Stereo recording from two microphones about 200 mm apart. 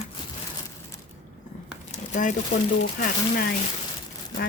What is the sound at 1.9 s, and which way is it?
Crumpling, 40° left (ahead or behind).